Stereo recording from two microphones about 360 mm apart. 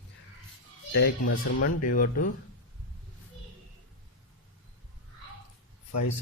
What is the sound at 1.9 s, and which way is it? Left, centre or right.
Speech, left.